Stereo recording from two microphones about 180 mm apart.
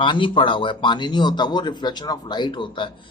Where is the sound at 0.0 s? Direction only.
25° left (ahead or behind).